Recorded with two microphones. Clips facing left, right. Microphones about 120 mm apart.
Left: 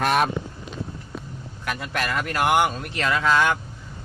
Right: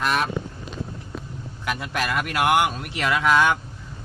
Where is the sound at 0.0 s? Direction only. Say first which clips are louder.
Left 3 dB; 55° left (ahead or behind).